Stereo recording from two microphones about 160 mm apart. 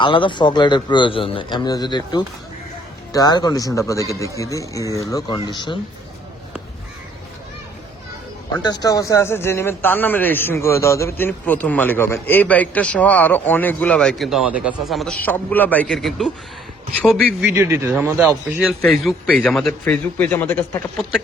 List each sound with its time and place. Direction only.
0.0 s speech: 30° left (ahead or behind)
8.6 s a man's voice: 25° left (ahead or behind); by 15.1 s centre (ahead or behind)
15.2 s a man's voice: 10° left (ahead or behind)
17.4 s speech: 20° right (ahead or behind)
19.3 s a man's voice: 5° left (ahead or behind)